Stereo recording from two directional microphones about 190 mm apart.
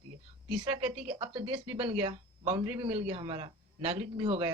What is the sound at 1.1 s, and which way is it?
Speech, 25° right (ahead or behind).